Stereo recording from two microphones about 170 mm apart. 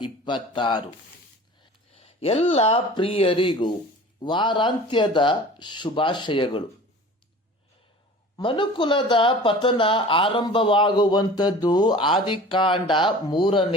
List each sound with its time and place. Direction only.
0.0 s speech: 30° left (ahead or behind)
1.9 s speech: 35° left (ahead or behind)
8.4 s speech: 30° left (ahead or behind)